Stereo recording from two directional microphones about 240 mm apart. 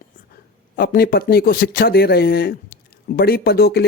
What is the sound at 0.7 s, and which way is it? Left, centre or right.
Speech, left.